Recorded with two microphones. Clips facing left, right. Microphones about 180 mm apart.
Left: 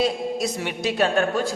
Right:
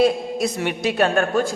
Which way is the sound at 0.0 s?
55° right (ahead or behind).